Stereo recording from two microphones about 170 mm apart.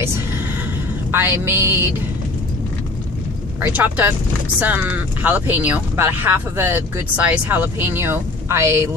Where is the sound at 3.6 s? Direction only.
10° right (ahead or behind).